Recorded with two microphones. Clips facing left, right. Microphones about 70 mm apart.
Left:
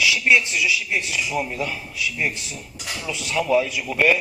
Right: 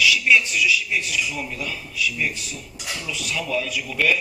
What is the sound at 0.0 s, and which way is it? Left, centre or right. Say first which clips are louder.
Speech: even; left.